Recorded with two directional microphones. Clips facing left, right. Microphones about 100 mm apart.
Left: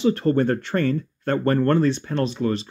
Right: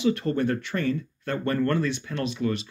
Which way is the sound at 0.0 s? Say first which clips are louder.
Left 5 dB; 40° left (ahead or behind).